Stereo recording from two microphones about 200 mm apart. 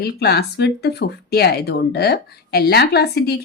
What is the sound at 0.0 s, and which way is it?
Speech, 55° left (ahead or behind).